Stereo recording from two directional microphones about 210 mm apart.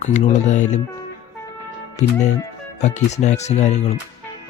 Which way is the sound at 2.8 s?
35° left (ahead or behind).